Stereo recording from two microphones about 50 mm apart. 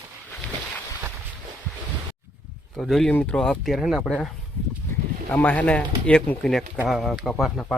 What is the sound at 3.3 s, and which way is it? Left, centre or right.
Speech, centre.